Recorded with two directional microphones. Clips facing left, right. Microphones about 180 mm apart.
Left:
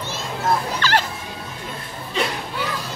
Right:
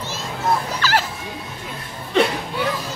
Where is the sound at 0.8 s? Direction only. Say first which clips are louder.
Even; 5° right (ahead or behind).